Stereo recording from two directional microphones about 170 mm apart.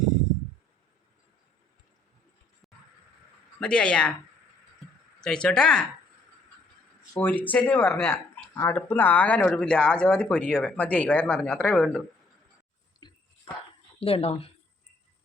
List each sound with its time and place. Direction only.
3.6 s speech: 5° left (ahead or behind)
5.2 s speech: 5° left (ahead or behind)
7.1 s speech: 10° left (ahead or behind)
13.0 s a sound: 25° left (ahead or behind)
14.0 s speech: 35° left (ahead or behind)